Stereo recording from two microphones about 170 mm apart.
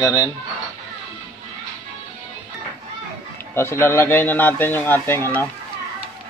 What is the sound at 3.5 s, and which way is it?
Speech, 15° left (ahead or behind).